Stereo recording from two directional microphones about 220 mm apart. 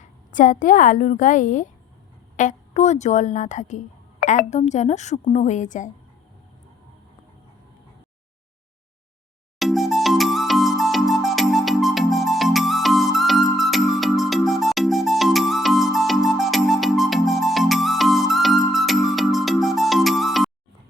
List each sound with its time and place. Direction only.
0.0 s a woman's voice: 35° left (ahead or behind)
9.6 s music: centre (ahead or behind)